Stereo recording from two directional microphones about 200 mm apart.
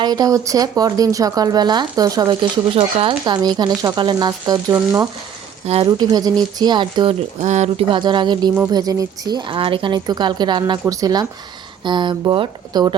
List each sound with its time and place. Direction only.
0.0 s a woman's voice: 20° right (ahead or behind)
5.6 s a woman's voice: 30° right (ahead or behind)
7.4 s a woman's voice: 35° right (ahead or behind)